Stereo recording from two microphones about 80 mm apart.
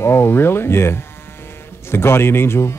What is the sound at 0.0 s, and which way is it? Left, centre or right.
Speech, left.